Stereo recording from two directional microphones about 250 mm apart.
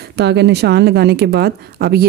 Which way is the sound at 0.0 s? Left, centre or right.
Right.